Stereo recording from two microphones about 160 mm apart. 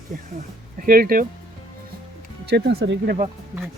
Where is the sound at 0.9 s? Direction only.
65° right (ahead or behind).